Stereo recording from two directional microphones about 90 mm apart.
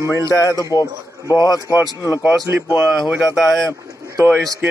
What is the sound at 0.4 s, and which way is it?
A man's voice, 40° left (ahead or behind).